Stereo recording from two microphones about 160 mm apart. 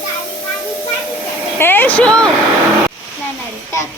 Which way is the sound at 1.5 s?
10° left (ahead or behind).